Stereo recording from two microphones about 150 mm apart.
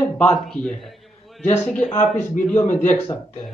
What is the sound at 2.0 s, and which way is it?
Speech, 55° left (ahead or behind).